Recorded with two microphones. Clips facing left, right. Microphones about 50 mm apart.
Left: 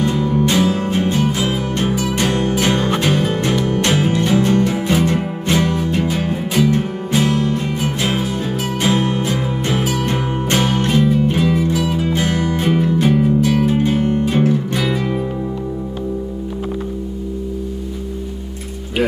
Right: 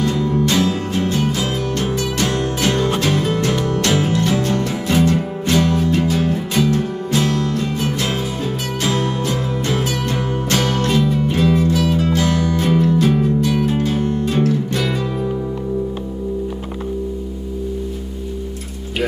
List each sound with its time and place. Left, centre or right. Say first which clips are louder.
0.0 s music: left 1 dB; left
12.1 s music: right 1 dB; left
13.8 s music: left 2 dB; left